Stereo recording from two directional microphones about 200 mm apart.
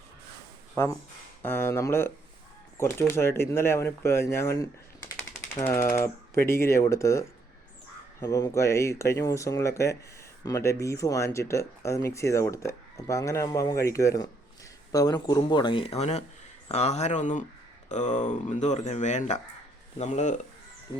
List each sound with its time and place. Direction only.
1.4 s speech: 10° left (ahead or behind); by 20.3 s 35° left (ahead or behind)